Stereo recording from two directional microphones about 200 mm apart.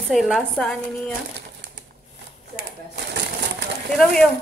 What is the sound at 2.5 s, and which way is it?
Shuffling cards, 55° right (ahead or behind).